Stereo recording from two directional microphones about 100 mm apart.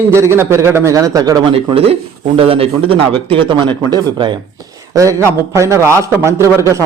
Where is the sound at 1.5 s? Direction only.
70° right (ahead or behind); by 4.4 s 50° right (ahead or behind).